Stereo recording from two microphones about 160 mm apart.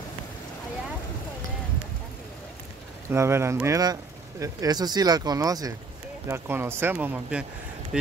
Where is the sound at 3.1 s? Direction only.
15° right (ahead or behind).